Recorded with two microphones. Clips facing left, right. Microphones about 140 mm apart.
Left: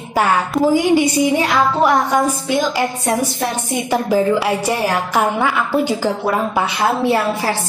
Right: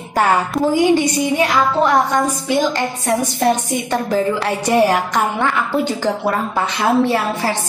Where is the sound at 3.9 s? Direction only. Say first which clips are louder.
Left 3 dB; 10° left (ahead or behind).